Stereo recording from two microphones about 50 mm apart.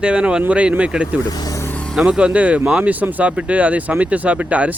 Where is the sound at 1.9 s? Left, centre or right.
Centre.